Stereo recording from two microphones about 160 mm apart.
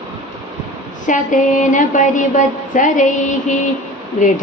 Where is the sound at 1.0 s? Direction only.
55° left (ahead or behind).